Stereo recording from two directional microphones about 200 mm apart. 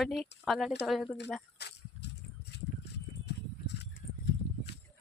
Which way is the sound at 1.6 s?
55° left (ahead or behind).